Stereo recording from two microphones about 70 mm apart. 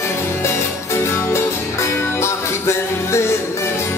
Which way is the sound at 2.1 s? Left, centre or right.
Left.